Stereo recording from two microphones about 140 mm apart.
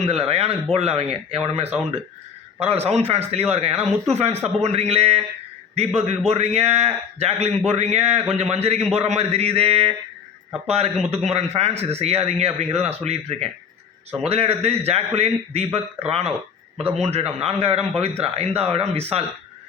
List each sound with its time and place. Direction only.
0.0 s a man's voice: 45° right (ahead or behind)